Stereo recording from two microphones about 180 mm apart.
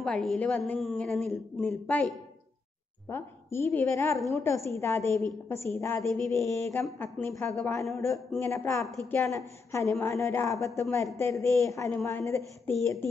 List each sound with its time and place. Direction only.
0.0 s a woman's voice: 5° left (ahead or behind)
8.8 s speech: centre (ahead or behind)
9.7 s a woman's voice: 15° left (ahead or behind)